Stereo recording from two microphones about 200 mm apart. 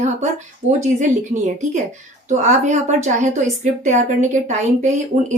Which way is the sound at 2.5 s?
35° right (ahead or behind).